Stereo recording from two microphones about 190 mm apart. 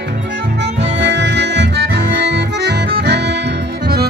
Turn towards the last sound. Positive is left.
turn(degrees=-60)  # may be behind; listen again after turning